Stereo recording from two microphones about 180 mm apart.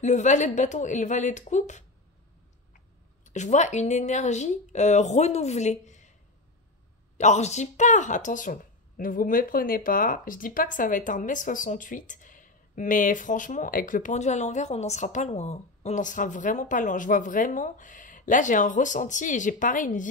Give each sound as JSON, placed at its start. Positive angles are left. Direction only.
{"t": 0.0, "sound": "speech", "side_deg": 40}
{"t": 3.3, "sound": "speech", "side_deg": 40}
{"t": 7.2, "sound": "speech", "side_deg": 40}